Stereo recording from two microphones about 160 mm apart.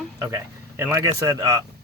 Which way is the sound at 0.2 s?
20° right (ahead or behind).